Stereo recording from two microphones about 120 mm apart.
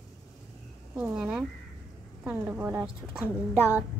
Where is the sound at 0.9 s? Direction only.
10° right (ahead or behind).